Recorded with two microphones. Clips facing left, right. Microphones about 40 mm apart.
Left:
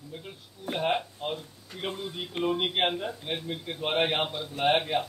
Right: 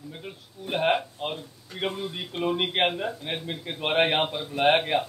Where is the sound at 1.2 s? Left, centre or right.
Right.